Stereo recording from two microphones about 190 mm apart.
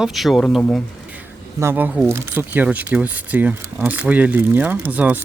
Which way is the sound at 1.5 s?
10° right (ahead or behind).